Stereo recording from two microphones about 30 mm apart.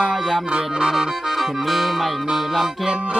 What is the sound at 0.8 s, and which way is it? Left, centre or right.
Music, centre.